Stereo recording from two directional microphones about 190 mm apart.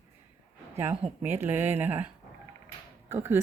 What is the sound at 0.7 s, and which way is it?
A woman's voice, 10° right (ahead or behind).